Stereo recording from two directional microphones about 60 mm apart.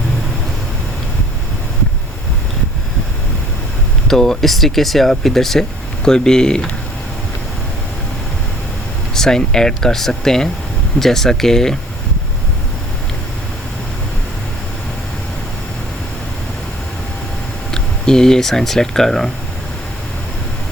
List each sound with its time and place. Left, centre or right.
4.1 s speech: centre
9.1 s speech: centre
17.7 s speech: centre